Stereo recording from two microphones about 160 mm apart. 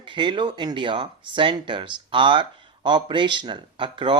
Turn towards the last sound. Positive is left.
turn(degrees=-30)  # may be behind; listen again after turning